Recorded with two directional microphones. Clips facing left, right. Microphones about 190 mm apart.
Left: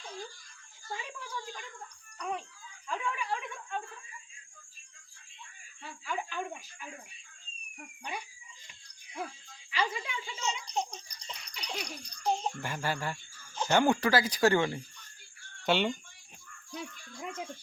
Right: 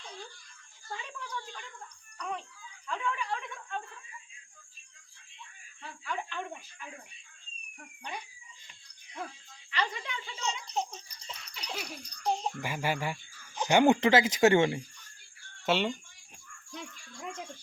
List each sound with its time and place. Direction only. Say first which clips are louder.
0.9 s a sound: even; 10° left (ahead or behind)
2.1 s speech: left 1 dB; 10° left (ahead or behind)
2.8 s a sound: right 1 dB; 10° left (ahead or behind)
5.8 s speech: left 1 dB; 5° left (ahead or behind)
9.7 s a child's voice: left 1 dB; 5° left (ahead or behind); by 14.8 s 20° right (ahead or behind)
15.6 s a child's voice: even; centre (ahead or behind)